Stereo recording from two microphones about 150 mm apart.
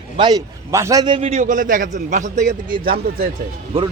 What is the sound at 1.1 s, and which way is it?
Speech, 45° right (ahead or behind).